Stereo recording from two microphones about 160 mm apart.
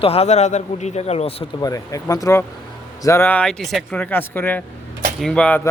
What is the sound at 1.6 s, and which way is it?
A man's voice, 20° left (ahead or behind).